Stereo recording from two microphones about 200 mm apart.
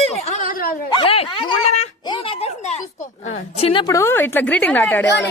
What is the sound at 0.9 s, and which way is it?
A woman's voice, 25° left (ahead or behind).